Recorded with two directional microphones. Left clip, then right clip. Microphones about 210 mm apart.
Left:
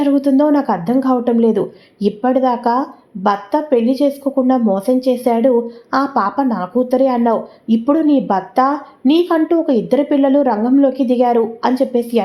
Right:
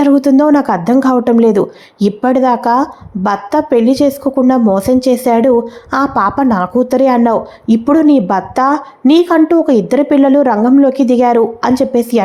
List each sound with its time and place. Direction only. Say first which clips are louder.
0.0 s a woman's voice: right 4 dB; 25° right (ahead or behind)